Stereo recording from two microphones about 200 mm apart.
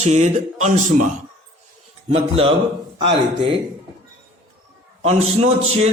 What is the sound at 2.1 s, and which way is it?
Speech, 30° right (ahead or behind).